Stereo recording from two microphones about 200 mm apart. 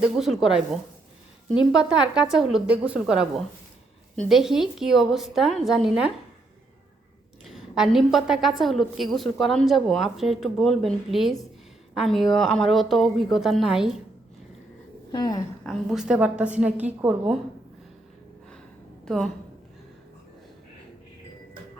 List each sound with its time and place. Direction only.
0.2 s a woman's voice: centre (ahead or behind)
7.4 s a woman's voice: centre (ahead or behind)
15.1 s speech: 20° left (ahead or behind)
15.6 s a woman's voice: centre (ahead or behind)
19.0 s a woman's voice: centre (ahead or behind)